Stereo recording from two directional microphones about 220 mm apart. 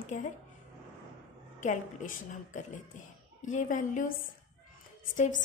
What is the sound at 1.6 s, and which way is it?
A woman's voice, 35° left (ahead or behind).